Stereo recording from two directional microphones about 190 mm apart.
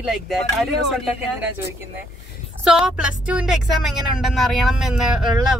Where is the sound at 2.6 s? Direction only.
5° right (ahead or behind).